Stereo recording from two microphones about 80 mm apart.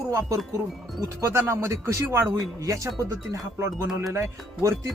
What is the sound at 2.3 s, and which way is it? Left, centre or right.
Speech, right.